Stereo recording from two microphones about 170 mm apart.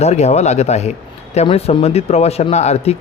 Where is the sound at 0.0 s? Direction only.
40° left (ahead or behind).